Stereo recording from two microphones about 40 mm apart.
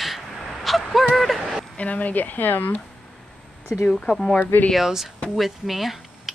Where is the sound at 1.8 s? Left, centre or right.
Left.